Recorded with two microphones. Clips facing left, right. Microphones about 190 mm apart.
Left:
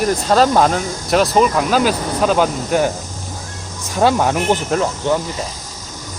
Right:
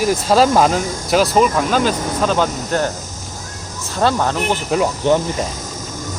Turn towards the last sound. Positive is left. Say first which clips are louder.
# right 2 dB
turn(degrees=-10)  # may be behind; listen again after turning